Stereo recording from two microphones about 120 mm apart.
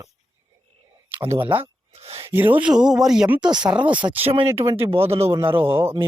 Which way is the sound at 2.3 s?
15° right (ahead or behind).